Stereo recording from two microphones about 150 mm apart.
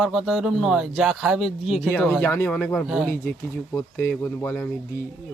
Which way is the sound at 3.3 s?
15° left (ahead or behind).